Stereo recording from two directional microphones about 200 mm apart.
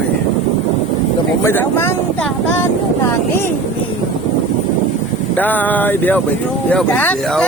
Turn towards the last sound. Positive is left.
turn(degrees=5)  # may be behind; listen again after turning